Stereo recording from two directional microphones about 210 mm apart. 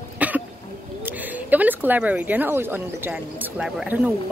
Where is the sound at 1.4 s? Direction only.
10° right (ahead or behind).